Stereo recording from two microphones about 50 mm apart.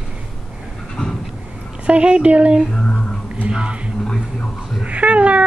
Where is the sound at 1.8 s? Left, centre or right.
Right.